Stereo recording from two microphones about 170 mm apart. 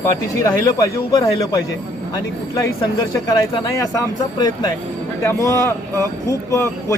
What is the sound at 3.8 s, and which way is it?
A man's voice, 20° left (ahead or behind).